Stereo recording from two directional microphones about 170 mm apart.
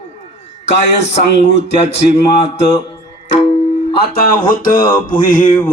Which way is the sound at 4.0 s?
60° left (ahead or behind).